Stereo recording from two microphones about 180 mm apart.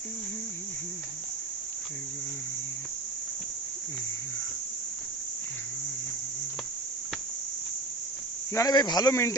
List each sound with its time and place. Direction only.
8.5 s speech: 20° left (ahead or behind)